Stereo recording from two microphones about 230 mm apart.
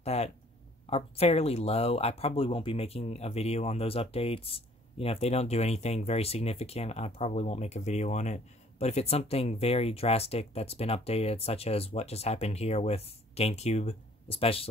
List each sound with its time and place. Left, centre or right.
0.0 s speech: left